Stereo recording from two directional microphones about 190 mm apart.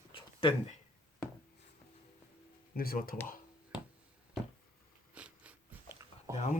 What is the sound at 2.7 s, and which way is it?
Speech, 50° left (ahead or behind).